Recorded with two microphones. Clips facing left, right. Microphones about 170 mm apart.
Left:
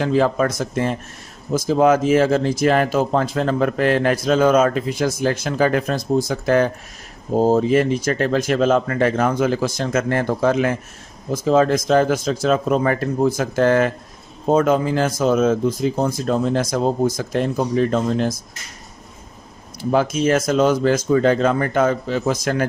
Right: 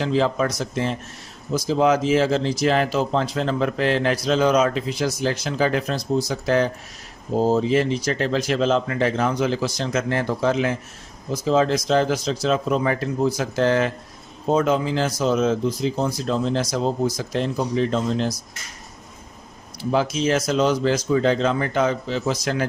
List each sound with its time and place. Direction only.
0.0 s speech: 50° left (ahead or behind)
19.9 s speech: 50° left (ahead or behind)